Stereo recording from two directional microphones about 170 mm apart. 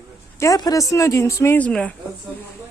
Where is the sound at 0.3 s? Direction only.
20° left (ahead or behind).